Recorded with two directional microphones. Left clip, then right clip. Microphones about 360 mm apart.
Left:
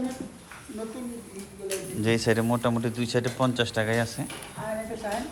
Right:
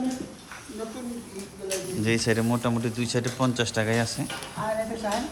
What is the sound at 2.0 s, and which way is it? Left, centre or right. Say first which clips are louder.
A man's voice: left 1 dB; centre.